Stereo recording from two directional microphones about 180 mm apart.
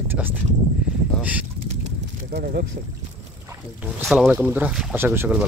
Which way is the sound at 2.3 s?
55° right (ahead or behind).